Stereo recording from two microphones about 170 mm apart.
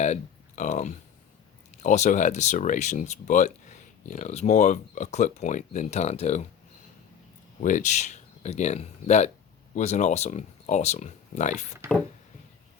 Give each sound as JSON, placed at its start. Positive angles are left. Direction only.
{"t": 0.0, "sound": "a sound", "side_deg": 45}
{"t": 1.8, "sound": "speech", "side_deg": 45}
{"t": 7.6, "sound": "speech", "side_deg": 50}
{"t": 11.8, "sound": "speech", "side_deg": -15}